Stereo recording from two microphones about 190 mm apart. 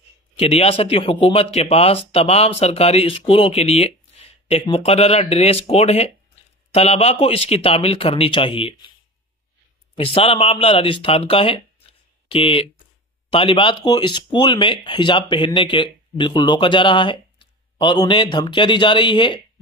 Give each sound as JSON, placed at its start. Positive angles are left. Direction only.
{"t": 0.4, "sound": "speech", "side_deg": 30}
{"t": 9.9, "sound": "speech", "side_deg": 30}